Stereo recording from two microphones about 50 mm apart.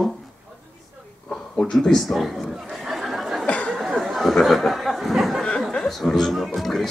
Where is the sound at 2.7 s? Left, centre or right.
Centre.